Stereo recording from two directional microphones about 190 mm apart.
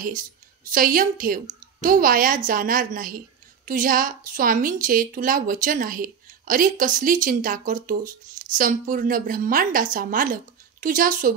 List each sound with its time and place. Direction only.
0.0 s a woman's voice: 45° right (ahead or behind)